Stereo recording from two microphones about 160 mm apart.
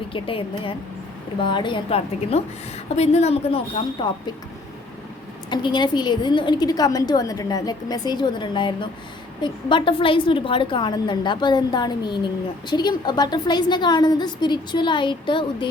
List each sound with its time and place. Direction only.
0.1 s a woman's voice: 35° left (ahead or behind)
5.5 s a woman's voice: 30° left (ahead or behind)